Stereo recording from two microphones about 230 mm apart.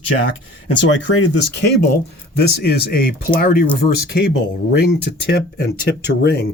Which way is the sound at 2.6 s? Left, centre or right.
Left.